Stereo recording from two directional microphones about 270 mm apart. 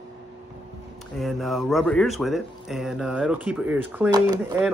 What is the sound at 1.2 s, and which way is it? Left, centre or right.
Speech, centre.